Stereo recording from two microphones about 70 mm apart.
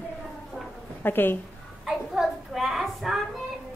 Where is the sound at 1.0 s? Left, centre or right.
Left.